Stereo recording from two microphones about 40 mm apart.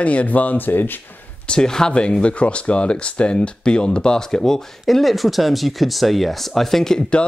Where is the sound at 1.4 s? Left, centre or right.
Left.